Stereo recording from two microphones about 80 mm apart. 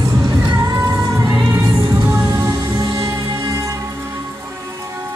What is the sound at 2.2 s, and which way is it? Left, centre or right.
Music, right.